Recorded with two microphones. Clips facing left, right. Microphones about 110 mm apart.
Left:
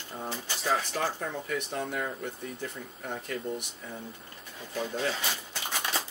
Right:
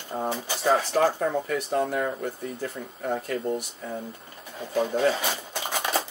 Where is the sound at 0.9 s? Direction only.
45° right (ahead or behind).